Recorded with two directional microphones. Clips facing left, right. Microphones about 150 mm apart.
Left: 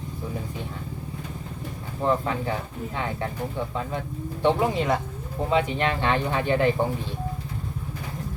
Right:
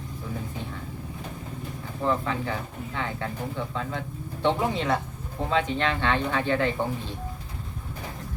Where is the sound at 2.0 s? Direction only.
20° left (ahead or behind).